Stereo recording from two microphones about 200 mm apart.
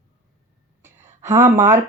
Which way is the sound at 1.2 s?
15° right (ahead or behind).